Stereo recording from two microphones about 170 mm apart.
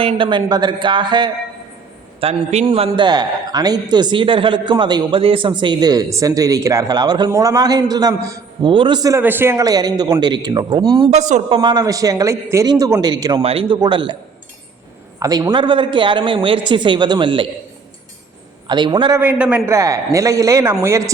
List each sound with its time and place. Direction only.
0.0 s a man's voice: 30° right (ahead or behind)
2.2 s a man's voice: 40° right (ahead or behind)
11.1 s speech: 45° right (ahead or behind)
11.5 s a man's voice: 25° right (ahead or behind)
13.4 s a man's voice: 35° right (ahead or behind)
15.2 s a man's voice: 25° right (ahead or behind)
18.7 s a man's voice: 25° right (ahead or behind)
19.2 s a man's voice: 10° right (ahead or behind)